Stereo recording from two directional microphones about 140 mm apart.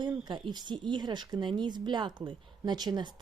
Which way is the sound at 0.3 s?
35° right (ahead or behind).